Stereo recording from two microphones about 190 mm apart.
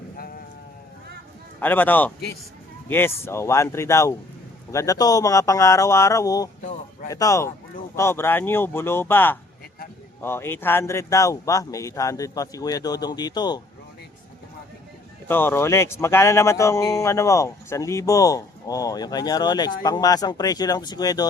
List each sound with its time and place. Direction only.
1.6 s speech: 10° left (ahead or behind)
3.2 s speech: 15° left (ahead or behind)
6.6 s a man's voice: 40° left (ahead or behind)
7.1 s speech: 15° left (ahead or behind)
15.3 s speech: 10° left (ahead or behind)